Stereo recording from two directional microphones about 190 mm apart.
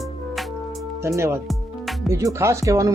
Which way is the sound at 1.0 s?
15° right (ahead or behind).